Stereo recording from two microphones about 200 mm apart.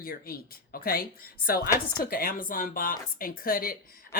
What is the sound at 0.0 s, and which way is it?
Speech, 45° left (ahead or behind).